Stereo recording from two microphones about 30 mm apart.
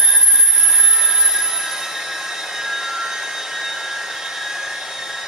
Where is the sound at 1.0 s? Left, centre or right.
Centre.